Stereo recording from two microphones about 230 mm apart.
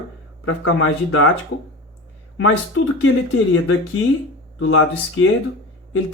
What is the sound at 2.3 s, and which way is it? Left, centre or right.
Speech, left.